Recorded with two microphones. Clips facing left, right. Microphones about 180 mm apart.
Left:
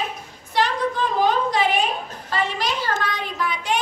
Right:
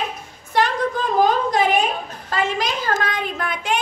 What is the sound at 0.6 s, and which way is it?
A woman's voice, 45° right (ahead or behind).